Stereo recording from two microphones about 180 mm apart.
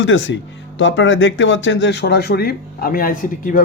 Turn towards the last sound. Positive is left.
turn(degrees=50)  # may be behind; listen again after turning